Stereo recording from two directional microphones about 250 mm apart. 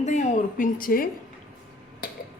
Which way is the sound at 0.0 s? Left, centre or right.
Left.